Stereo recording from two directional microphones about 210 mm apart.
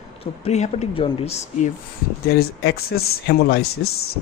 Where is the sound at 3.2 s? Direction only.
50° left (ahead or behind).